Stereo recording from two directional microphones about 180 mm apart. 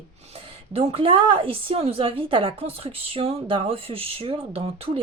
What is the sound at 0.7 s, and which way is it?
A woman's voice, 35° right (ahead or behind).